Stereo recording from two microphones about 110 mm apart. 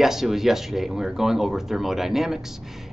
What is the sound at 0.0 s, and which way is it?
Speech, 5° right (ahead or behind).